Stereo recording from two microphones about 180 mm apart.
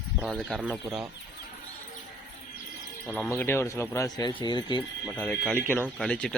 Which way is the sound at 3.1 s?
10° left (ahead or behind).